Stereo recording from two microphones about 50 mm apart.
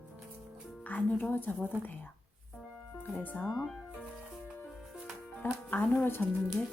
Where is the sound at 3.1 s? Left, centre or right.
Left.